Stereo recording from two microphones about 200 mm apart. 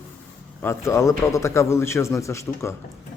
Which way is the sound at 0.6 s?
15° left (ahead or behind).